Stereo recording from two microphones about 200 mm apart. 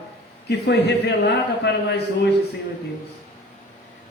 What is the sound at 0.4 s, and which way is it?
A man's voice, 55° left (ahead or behind).